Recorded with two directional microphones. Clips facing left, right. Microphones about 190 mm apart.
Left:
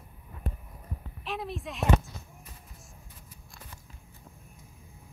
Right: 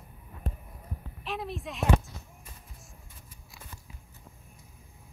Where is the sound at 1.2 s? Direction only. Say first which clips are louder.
Even; centre (ahead or behind).